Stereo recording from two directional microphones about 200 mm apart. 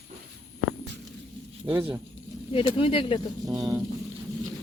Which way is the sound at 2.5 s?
25° left (ahead or behind).